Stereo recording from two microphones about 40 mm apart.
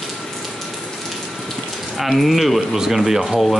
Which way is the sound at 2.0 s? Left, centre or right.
Centre.